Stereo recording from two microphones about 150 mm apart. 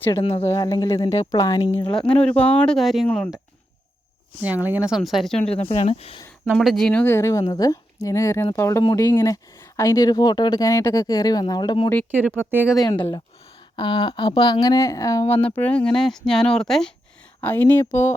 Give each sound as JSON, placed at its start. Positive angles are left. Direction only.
{"t": 0.2, "sound": "speech", "side_deg": 40}
{"t": 0.5, "sound": "speech", "side_deg": 25}
{"t": 1.9, "sound": "speech", "side_deg": 5}
{"t": 4.4, "sound": "speech", "side_deg": -10}
{"t": 5.5, "sound": "speech", "side_deg": 40}
{"t": 6.5, "sound": "speech", "side_deg": 0}
{"t": 12.4, "sound": "speech", "side_deg": -15}
{"t": 12.7, "sound": "speech", "side_deg": 25}
{"t": 15.4, "sound": "speech", "side_deg": 10}